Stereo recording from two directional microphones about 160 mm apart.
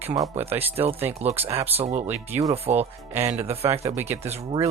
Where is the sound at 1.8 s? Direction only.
40° right (ahead or behind).